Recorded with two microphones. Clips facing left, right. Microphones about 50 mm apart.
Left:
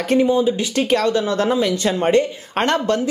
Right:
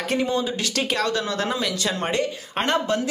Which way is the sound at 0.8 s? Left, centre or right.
Left.